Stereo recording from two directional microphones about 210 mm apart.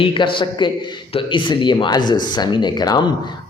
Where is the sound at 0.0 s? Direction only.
25° left (ahead or behind).